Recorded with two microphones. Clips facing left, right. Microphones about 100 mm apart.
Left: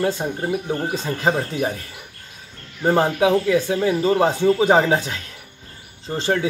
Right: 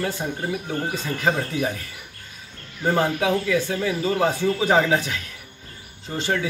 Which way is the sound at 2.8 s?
30° left (ahead or behind).